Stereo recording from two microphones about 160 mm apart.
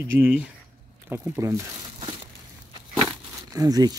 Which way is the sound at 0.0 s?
10° right (ahead or behind).